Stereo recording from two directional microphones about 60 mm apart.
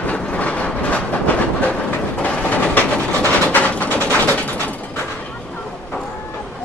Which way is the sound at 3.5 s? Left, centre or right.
Left.